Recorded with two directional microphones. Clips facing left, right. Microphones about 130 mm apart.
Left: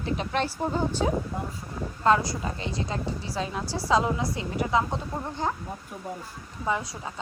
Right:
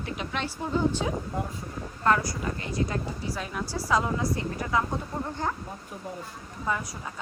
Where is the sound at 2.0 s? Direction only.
25° left (ahead or behind).